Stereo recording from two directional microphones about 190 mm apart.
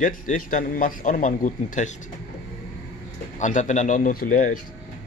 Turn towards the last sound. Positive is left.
turn(degrees=45)  # may be behind; listen again after turning